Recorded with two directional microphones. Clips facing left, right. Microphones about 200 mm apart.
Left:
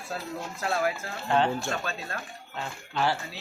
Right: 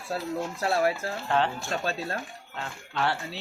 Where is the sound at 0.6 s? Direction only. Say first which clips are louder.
Right 2 dB; 30° right (ahead or behind).